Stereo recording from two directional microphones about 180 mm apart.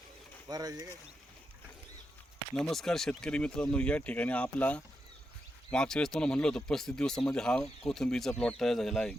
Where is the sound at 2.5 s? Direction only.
Centre (ahead or behind).